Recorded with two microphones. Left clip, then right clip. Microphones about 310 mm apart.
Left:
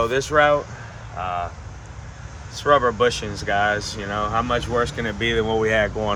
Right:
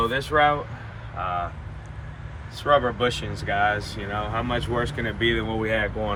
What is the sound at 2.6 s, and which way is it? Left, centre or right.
Speech, left.